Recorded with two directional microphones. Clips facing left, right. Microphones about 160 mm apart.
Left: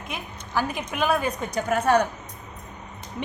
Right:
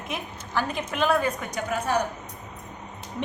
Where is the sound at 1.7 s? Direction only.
60° left (ahead or behind).